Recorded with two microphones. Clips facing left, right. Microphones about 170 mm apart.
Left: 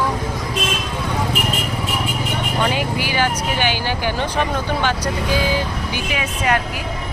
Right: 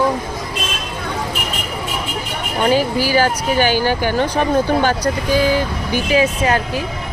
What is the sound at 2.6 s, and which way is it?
Speech, 35° right (ahead or behind).